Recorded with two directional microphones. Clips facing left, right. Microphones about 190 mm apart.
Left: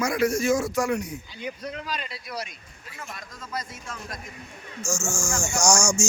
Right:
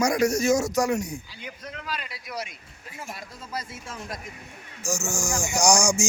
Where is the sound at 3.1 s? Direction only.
30° right (ahead or behind).